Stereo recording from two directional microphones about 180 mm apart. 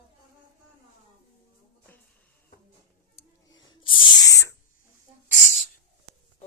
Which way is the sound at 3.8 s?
90° left.